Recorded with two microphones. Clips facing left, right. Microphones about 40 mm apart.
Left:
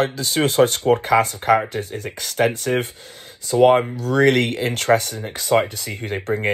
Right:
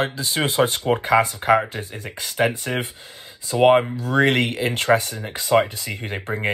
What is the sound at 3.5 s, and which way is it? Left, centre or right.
Speech, right.